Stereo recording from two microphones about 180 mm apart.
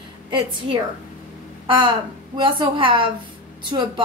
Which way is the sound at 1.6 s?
25° right (ahead or behind).